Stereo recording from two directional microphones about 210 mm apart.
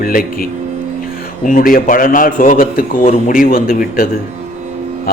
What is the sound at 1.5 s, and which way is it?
A man's voice, 40° left (ahead or behind).